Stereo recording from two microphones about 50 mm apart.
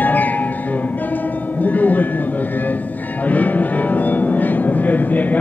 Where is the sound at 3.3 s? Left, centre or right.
Left.